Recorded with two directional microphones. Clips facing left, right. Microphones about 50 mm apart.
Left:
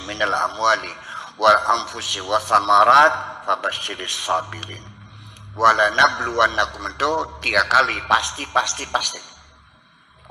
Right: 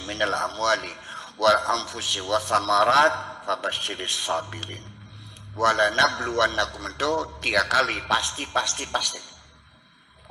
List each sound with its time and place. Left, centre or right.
0.0 s a man's voice: left
7.9 s a man's voice: left